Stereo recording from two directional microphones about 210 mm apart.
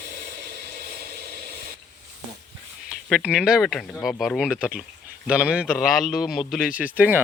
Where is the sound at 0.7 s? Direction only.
40° right (ahead or behind).